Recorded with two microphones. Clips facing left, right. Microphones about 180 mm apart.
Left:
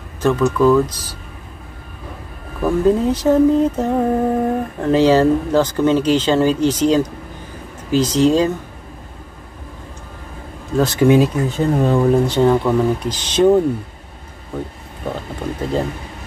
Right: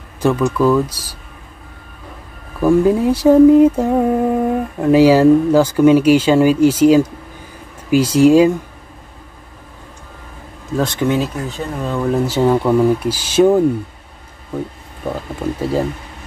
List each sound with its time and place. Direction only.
0.2 s speech: 15° right (ahead or behind)
2.6 s speech: 10° right (ahead or behind)
10.8 s speech: 5° left (ahead or behind)
11.7 s speech: 30° left (ahead or behind)
12.1 s speech: 5° right (ahead or behind)